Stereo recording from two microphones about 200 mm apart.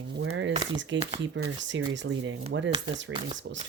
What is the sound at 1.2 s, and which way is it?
Speech, 70° right (ahead or behind).